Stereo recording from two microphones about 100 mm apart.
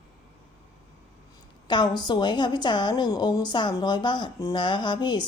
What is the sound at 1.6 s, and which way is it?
A woman's voice, 45° left (ahead or behind).